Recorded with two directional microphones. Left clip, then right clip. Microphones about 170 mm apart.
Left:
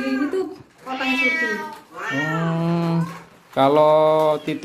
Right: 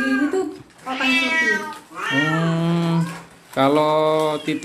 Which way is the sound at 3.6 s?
15° left (ahead or behind).